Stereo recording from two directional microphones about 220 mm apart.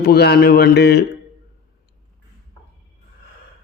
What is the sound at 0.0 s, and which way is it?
Speech, 45° left (ahead or behind).